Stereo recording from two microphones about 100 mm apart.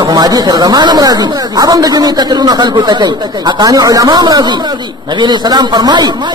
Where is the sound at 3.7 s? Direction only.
35° right (ahead or behind).